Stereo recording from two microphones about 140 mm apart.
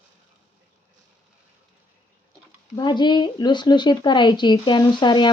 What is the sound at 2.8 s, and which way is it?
Speech, 35° left (ahead or behind).